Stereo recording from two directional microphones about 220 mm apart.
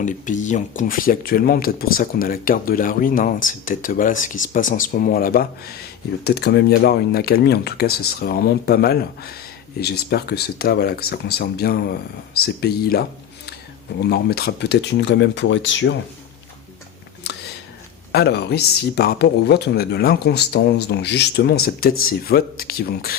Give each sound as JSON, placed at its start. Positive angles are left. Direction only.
{"t": 0.0, "sound": "speech", "side_deg": 35}
{"t": 17.2, "sound": "a sound", "side_deg": 50}
{"t": 18.1, "sound": "speech", "side_deg": 45}